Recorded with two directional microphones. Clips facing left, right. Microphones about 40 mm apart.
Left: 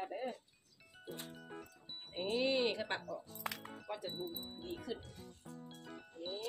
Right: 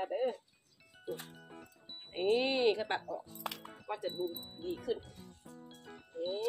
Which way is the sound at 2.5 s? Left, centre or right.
Centre.